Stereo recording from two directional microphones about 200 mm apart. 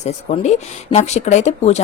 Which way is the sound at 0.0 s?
35° left (ahead or behind).